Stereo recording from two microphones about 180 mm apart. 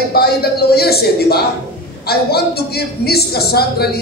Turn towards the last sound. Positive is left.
turn(degrees=60)  # may be behind; listen again after turning